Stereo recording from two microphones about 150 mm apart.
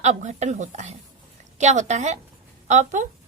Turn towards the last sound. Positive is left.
turn(degrees=-55)  # may be behind; listen again after turning